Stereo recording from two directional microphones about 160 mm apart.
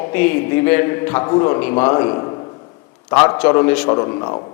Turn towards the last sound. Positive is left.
turn(degrees=30)  # may be behind; listen again after turning